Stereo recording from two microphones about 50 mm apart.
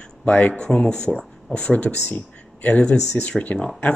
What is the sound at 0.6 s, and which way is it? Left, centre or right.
Speech, centre.